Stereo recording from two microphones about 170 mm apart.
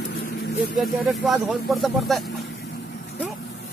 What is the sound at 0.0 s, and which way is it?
Vehicle, 65° left (ahead or behind).